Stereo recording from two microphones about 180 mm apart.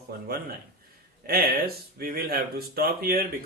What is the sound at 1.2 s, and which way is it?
Speech, 55° right (ahead or behind).